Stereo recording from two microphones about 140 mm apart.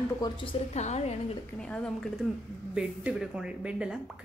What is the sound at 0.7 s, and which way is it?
Speech, 55° left (ahead or behind).